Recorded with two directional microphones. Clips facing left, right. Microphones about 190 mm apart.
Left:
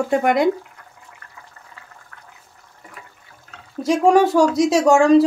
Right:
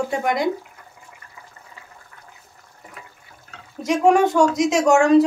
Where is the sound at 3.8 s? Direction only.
35° left (ahead or behind).